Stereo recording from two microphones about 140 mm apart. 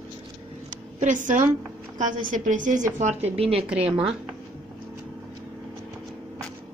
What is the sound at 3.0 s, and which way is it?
Speech, 55° right (ahead or behind).